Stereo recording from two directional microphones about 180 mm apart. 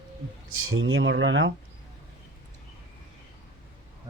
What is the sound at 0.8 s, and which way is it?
Speech, 90° right.